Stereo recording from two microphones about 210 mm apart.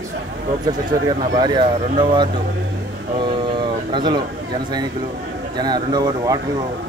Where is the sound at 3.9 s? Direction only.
20° right (ahead or behind).